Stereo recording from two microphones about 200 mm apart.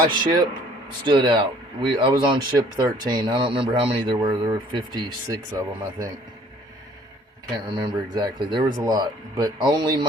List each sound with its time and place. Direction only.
0.1 s speech: 20° right (ahead or behind)
7.7 s speech: 25° right (ahead or behind)